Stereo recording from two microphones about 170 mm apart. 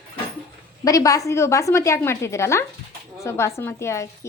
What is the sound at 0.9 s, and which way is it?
A woman's voice, 20° left (ahead or behind).